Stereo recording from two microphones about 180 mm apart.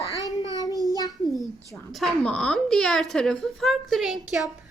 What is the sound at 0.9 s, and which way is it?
Child singing, 20° left (ahead or behind).